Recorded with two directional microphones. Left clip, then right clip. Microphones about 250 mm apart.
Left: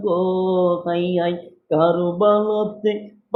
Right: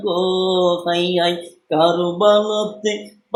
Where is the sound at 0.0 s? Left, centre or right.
Centre.